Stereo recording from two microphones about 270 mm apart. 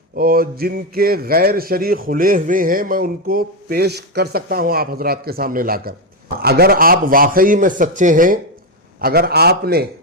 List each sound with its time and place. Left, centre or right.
0.2 s a man's voice: right